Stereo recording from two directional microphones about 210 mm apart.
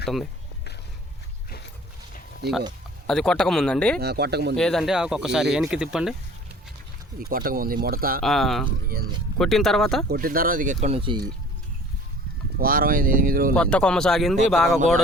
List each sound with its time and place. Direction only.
3.1 s speech: 5° left (ahead or behind)
4.0 s speech: 50° right (ahead or behind)
4.5 s speech: centre (ahead or behind)
7.2 s speech: 45° right (ahead or behind)
8.2 s speech: centre (ahead or behind)
8.9 s speech: 45° right (ahead or behind)
9.4 s speech: centre (ahead or behind)
10.1 s speech: 45° right (ahead or behind); by 11.2 s 25° right (ahead or behind)
12.5 s speech: 45° right (ahead or behind)
13.6 s speech: 5° left (ahead or behind)